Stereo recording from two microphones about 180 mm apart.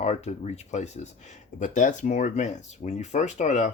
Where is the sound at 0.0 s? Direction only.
40° left (ahead or behind).